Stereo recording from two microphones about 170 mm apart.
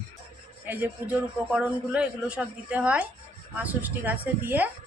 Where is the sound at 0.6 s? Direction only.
10° right (ahead or behind).